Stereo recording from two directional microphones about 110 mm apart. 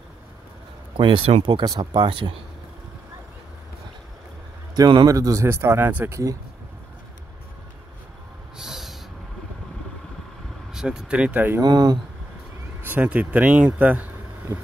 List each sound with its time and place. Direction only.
0.9 s speech: 50° right (ahead or behind)
4.7 s speech: 40° right (ahead or behind)
5.0 s speech: 30° right (ahead or behind)
8.5 s snort: centre (ahead or behind)
10.7 s speech: 5° right (ahead or behind)
11.6 s speech: 35° right (ahead or behind)
12.8 s speech: 15° right (ahead or behind)